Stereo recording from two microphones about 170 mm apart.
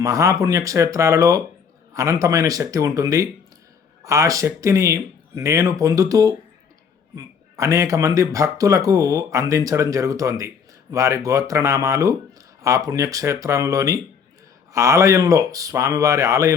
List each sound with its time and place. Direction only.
0.0 s speech: 20° right (ahead or behind)